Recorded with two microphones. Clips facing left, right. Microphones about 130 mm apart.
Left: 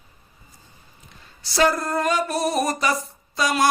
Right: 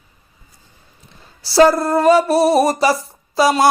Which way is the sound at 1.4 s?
35° right (ahead or behind).